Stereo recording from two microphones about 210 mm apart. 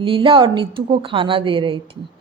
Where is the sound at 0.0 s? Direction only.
25° right (ahead or behind).